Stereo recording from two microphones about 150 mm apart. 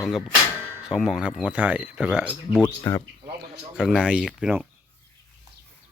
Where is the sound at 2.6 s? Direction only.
25° left (ahead or behind).